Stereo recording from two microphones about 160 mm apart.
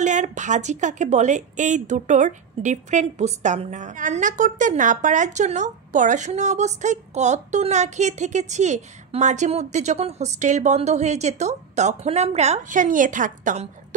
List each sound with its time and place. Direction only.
0.0 s a woman's voice: 50° right (ahead or behind)